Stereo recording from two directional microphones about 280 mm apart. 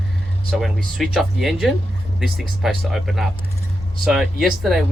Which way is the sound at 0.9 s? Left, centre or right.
Centre.